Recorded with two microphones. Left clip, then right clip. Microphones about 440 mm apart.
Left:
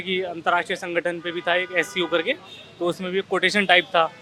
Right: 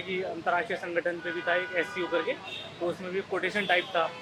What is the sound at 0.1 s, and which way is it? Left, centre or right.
Speech, left.